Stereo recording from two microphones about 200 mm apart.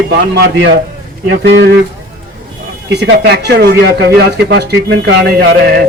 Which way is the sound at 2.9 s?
60° right (ahead or behind).